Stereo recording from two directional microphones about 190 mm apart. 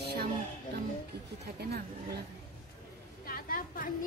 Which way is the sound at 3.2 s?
50° left (ahead or behind).